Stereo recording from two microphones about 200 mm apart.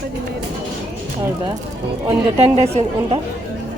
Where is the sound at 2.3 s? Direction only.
30° right (ahead or behind).